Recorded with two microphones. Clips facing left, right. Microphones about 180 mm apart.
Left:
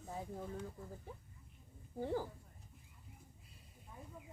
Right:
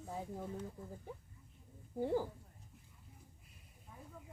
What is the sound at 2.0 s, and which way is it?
Speech, 15° right (ahead or behind).